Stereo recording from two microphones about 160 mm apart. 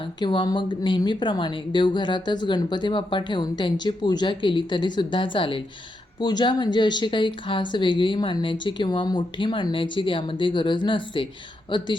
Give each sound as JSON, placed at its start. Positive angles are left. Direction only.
{"t": 0.2, "sound": "a woman's voice", "side_deg": 30}